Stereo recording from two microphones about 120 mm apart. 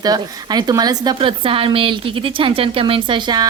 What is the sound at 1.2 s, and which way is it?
A woman's voice, 45° right (ahead or behind).